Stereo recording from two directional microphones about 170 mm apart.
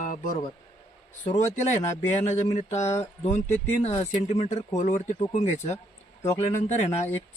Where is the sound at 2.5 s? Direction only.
45° left (ahead or behind).